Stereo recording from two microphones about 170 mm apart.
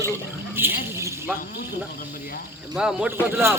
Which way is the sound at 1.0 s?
15° right (ahead or behind).